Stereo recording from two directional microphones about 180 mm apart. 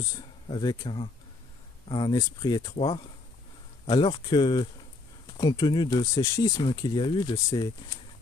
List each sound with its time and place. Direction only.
0.5 s speech: 25° left (ahead or behind)